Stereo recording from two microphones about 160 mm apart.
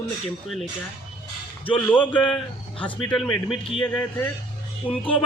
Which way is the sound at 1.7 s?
10° left (ahead or behind).